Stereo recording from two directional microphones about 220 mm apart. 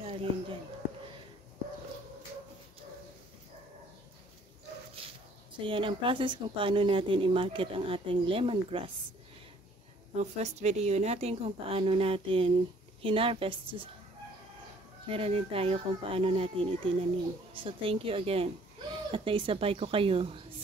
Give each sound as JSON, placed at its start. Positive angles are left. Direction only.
{"t": 0.0, "sound": "speech", "side_deg": -25}
{"t": 5.6, "sound": "speech", "side_deg": -25}
{"t": 10.1, "sound": "speech", "side_deg": -30}
{"t": 15.0, "sound": "speech", "side_deg": -25}